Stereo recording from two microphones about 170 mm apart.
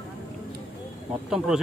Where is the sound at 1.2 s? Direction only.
5° right (ahead or behind).